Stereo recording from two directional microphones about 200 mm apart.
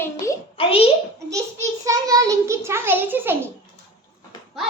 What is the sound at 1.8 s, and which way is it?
A child's voice, 15° right (ahead or behind).